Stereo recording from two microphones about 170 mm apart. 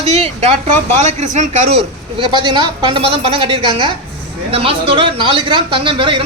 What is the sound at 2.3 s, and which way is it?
A woman's voice, 30° right (ahead or behind).